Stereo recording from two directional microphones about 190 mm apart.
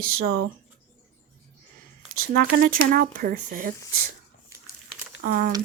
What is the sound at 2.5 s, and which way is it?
Speech, 50° right (ahead or behind).